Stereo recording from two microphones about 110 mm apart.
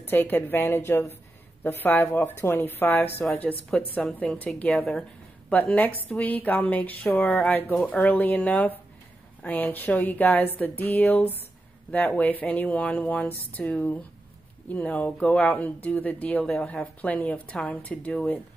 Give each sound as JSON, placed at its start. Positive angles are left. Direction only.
{"t": 0.0, "sound": "speech", "side_deg": 20}